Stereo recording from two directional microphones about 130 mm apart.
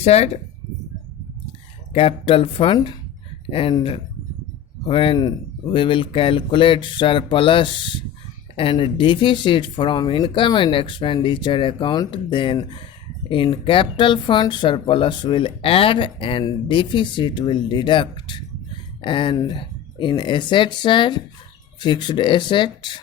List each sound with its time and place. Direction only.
0.0 s speech: 55° left (ahead or behind)
1.9 s speech: 45° left (ahead or behind)
4.9 s speech: 40° left (ahead or behind)